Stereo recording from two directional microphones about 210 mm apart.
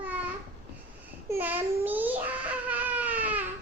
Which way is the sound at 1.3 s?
10° right (ahead or behind).